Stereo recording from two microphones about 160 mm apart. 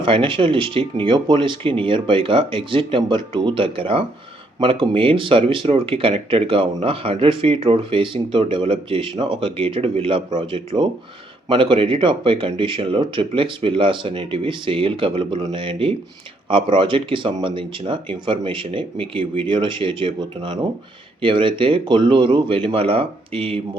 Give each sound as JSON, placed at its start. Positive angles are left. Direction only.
{"t": 0.0, "sound": "speech", "side_deg": -35}